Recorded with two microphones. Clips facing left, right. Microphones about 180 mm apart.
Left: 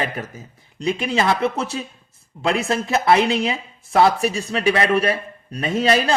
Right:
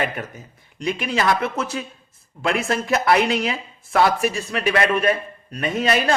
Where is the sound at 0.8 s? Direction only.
25° left (ahead or behind).